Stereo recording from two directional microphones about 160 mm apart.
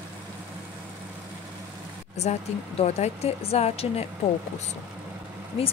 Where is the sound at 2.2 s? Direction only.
45° left (ahead or behind).